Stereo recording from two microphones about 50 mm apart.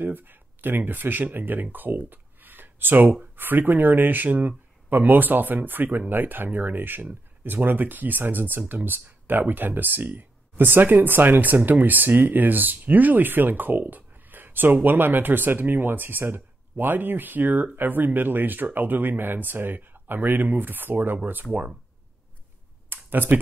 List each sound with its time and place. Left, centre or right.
0.0 s speech: right
21.5 s speech: right
22.8 s a sound: right